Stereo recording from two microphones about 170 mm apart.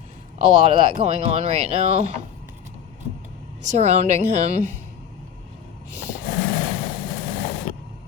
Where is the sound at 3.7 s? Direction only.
40° right (ahead or behind).